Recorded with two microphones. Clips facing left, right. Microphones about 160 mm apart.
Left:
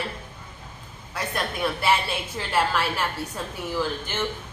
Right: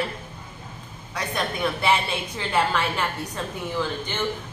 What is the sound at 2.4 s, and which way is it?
A woman's voice, 5° left (ahead or behind).